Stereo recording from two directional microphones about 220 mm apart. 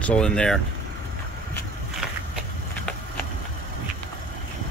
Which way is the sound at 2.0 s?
5° right (ahead or behind).